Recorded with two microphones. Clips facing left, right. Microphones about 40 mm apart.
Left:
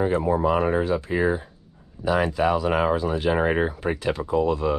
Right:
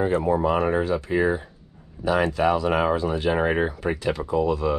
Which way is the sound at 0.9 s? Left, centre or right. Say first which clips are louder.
Right 1 dB; right.